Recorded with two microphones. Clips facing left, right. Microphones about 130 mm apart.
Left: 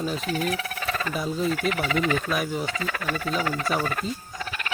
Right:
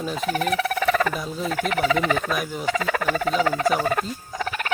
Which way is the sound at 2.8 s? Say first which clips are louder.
Right 6 dB; 90° right.